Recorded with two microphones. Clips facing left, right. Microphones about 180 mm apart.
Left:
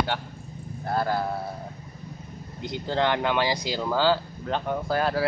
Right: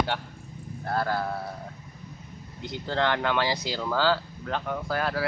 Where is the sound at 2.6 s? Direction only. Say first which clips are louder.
Left 2 dB; 15° left (ahead or behind).